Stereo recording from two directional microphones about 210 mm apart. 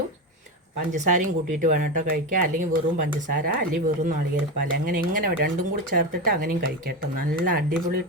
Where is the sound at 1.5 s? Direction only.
40° right (ahead or behind).